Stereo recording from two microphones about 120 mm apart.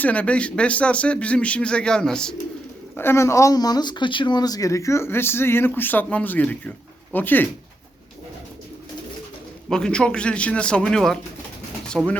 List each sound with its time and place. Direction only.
0.0 s speech: 10° left (ahead or behind)
2.9 s speech: 20° left (ahead or behind)
9.6 s speech: 5° left (ahead or behind)